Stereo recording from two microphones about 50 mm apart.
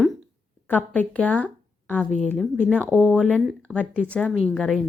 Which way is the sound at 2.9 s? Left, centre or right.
Right.